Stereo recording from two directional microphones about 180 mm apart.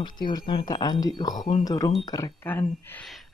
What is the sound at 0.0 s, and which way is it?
Speech, 25° left (ahead or behind).